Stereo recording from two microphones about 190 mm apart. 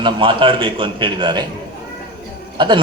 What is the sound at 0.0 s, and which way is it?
A man's voice, 25° right (ahead or behind).